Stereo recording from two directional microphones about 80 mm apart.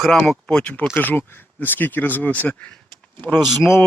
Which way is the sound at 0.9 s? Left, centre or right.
Left.